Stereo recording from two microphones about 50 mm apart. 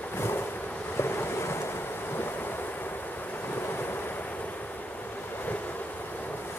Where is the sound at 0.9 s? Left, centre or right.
Left.